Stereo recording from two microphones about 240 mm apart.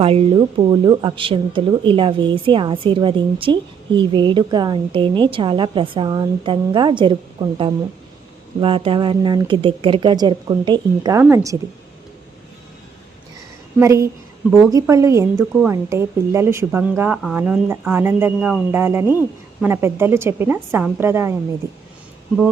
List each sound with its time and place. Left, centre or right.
0.0 s speech: right
13.7 s a woman's voice: centre